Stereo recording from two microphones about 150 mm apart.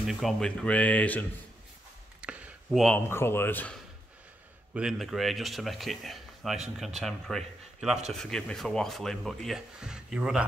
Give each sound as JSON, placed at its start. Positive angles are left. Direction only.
{"t": 0.0, "sound": "speech", "side_deg": 0}
{"t": 2.2, "sound": "a sound", "side_deg": -10}
{"t": 3.1, "sound": "speech", "side_deg": 15}
{"t": 4.7, "sound": "speech", "side_deg": -5}